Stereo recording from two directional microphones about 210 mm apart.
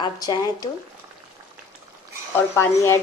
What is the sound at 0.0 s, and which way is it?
Speech, 20° left (ahead or behind).